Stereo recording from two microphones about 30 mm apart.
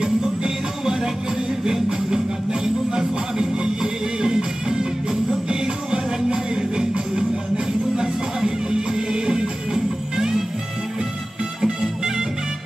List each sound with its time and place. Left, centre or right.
0.0 s music: right
4.2 s music: right
11.6 s music: right